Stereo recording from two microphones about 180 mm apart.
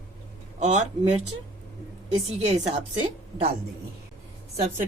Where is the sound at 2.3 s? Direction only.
40° right (ahead or behind).